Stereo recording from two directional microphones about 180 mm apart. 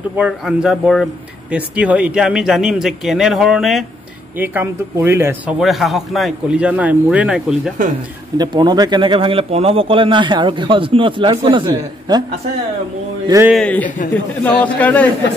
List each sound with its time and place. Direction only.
0.2 s speech: 5° right (ahead or behind)
5.6 s speech: centre (ahead or behind)
8.4 s speech: 25° right (ahead or behind)
13.5 s a man's voice: 5° left (ahead or behind)